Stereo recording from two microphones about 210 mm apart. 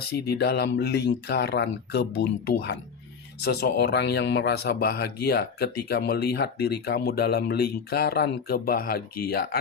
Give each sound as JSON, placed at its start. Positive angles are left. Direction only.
{"t": 0.0, "sound": "speech", "side_deg": 50}